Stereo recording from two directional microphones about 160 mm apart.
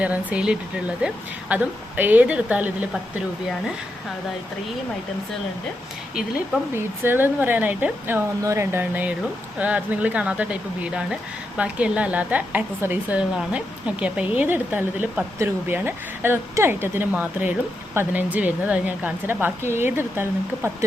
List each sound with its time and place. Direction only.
0.0 s speech: 10° right (ahead or behind)
7.0 s speech: 15° right (ahead or behind)